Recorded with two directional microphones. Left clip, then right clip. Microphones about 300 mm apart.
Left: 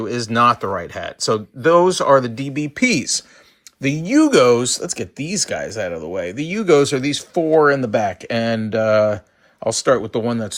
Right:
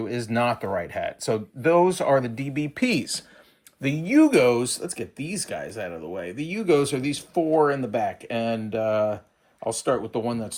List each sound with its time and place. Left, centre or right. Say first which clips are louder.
0.0 s speech: left 9 dB; centre